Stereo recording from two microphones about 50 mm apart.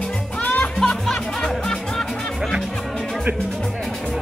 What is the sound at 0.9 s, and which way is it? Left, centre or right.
Music, centre.